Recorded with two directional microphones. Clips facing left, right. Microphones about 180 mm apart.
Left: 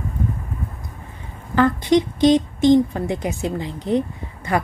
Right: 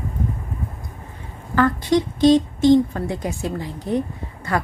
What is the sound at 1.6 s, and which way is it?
A woman's voice, 20° left (ahead or behind).